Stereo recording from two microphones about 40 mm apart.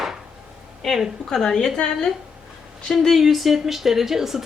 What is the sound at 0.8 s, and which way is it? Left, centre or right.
Speech, centre.